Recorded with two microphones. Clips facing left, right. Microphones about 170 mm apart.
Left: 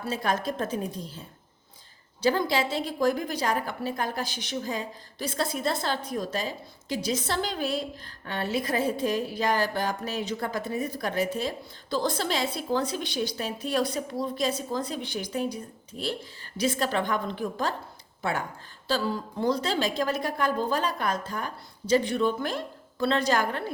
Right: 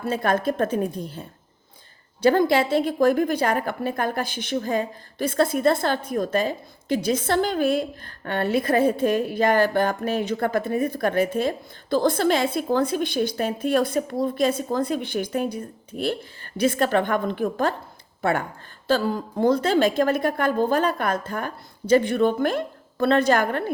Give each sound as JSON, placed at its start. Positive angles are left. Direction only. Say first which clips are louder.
{"t": 0.0, "sound": "a woman's voice", "louder": "right 6 dB", "side_deg": -55}